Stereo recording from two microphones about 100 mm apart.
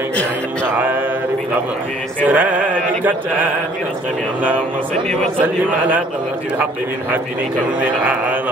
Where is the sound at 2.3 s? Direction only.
15° right (ahead or behind).